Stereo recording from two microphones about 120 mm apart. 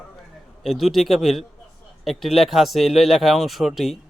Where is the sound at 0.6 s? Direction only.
Centre (ahead or behind).